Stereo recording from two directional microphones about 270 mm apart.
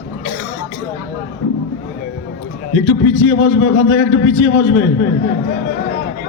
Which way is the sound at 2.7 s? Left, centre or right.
Left.